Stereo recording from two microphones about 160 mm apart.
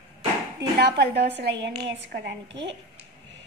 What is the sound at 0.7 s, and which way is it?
A woman's voice, 90° right.